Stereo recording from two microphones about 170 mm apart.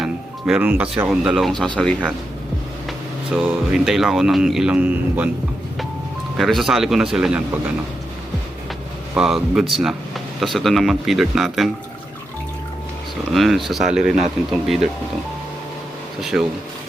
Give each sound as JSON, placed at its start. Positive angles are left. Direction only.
{"t": 0.0, "sound": "speech", "side_deg": -5}
{"t": 3.3, "sound": "speech", "side_deg": 0}
{"t": 6.3, "sound": "speech", "side_deg": 0}
{"t": 9.1, "sound": "speech", "side_deg": 0}
{"t": 13.3, "sound": "speech", "side_deg": 0}
{"t": 16.2, "sound": "speech", "side_deg": 0}